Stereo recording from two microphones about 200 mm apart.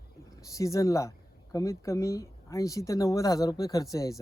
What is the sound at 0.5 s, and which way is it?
Speech, 15° left (ahead or behind).